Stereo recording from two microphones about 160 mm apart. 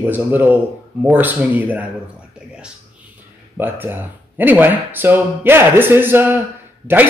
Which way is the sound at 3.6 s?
10° right (ahead or behind).